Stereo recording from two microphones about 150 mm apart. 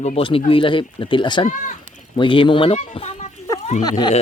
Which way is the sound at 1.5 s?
55° left (ahead or behind).